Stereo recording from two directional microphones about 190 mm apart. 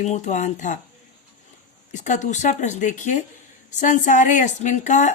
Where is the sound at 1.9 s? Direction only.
40° left (ahead or behind).